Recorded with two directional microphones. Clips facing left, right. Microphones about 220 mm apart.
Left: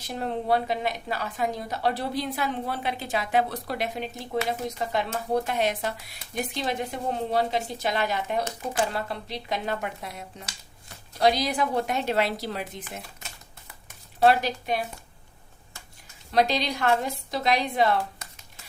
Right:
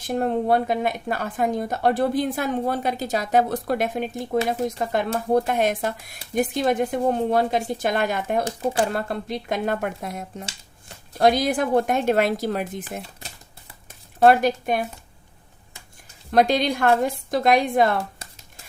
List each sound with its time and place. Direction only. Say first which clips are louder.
0.0 s a woman's voice: right 7 dB; 50° right (ahead or behind)
13.2 s typewriter: right 3 dB; 35° right (ahead or behind)
14.2 s a woman's voice: right 5 dB; 50° right (ahead or behind)
16.3 s a woman's voice: right 5 dB; 50° right (ahead or behind)
18.2 s shuffling cards: right 2 dB; 30° right (ahead or behind)